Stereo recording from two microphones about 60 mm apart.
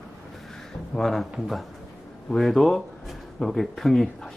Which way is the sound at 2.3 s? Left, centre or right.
Centre.